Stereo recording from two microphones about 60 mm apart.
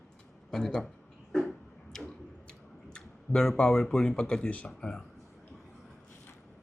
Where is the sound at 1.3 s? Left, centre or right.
Centre.